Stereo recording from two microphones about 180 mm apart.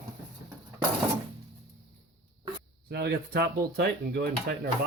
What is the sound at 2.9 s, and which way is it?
Speech, 65° right (ahead or behind).